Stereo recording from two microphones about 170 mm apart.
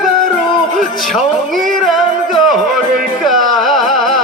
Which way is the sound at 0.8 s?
Centre (ahead or behind).